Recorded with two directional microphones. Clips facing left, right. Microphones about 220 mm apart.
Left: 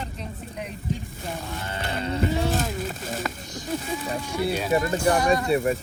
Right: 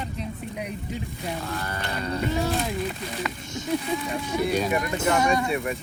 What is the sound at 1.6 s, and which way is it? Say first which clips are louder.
Speech: left 1 dB; 25° left (ahead or behind).